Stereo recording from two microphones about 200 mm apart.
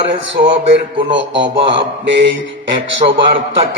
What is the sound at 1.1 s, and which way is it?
Mantra, 65° right (ahead or behind).